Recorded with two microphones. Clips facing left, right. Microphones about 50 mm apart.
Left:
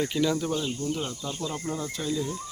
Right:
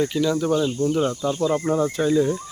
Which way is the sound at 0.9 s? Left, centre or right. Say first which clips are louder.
Right 10 dB; right.